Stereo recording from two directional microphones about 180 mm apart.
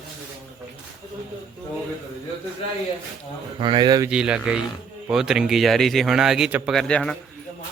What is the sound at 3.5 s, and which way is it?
Speech, 25° right (ahead or behind).